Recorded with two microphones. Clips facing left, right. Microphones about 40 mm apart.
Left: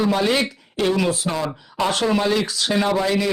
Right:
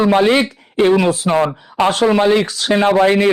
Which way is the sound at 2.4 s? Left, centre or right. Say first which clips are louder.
Right 6 dB; right.